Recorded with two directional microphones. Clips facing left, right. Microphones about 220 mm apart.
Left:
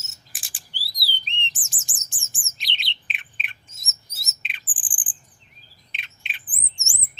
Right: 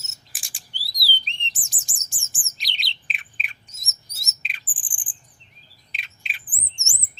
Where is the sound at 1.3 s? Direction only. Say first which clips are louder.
Left 5 dB; 35° right (ahead or behind).